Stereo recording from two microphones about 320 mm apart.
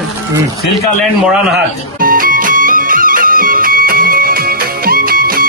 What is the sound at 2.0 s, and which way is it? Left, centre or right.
Music, right.